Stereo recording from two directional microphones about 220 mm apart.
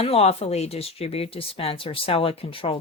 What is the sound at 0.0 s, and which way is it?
Speech, 25° left (ahead or behind).